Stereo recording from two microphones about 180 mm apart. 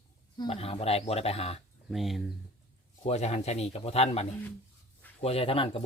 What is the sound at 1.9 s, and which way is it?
Speech, centre (ahead or behind).